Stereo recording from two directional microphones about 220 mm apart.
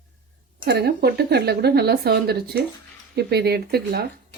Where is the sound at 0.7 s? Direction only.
45° right (ahead or behind).